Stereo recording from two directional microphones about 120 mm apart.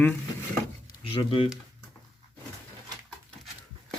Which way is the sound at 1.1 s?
45° left (ahead or behind).